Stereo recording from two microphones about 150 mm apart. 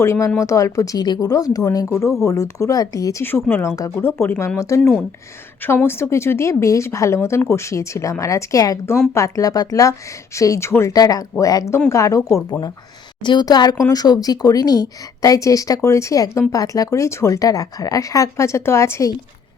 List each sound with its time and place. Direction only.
0.0 s speech: 15° left (ahead or behind)
4.8 s speech: 5° left (ahead or behind)
5.6 s speech: 15° left (ahead or behind)